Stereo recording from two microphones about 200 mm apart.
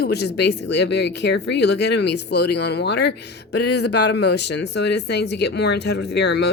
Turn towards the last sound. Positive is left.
turn(degrees=55)  # may be behind; listen again after turning